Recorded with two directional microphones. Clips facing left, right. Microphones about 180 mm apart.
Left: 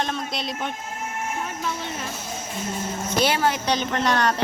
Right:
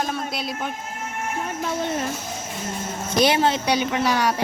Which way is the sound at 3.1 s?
15° right (ahead or behind).